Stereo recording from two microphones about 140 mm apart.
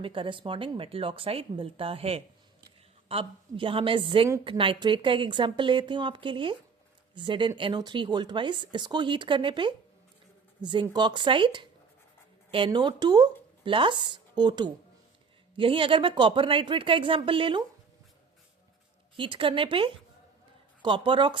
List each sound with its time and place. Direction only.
0.0 s speech: 40° right (ahead or behind)
19.1 s speech: 40° right (ahead or behind)